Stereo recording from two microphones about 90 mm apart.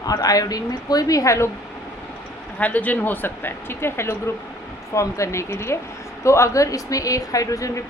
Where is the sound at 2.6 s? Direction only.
15° left (ahead or behind).